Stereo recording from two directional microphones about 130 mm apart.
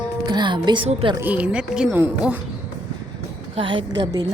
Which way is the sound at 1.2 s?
10° right (ahead or behind).